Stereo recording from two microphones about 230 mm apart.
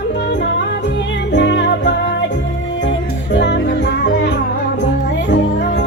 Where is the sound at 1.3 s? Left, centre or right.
Left.